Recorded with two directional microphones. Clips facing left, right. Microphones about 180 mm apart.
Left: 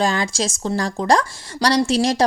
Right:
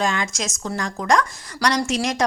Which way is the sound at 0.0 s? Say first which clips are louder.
Left 4 dB; 35° left (ahead or behind).